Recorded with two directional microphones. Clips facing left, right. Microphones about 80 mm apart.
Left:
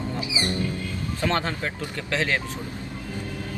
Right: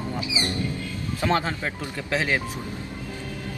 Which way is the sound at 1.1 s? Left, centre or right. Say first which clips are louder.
Right 2 dB; centre.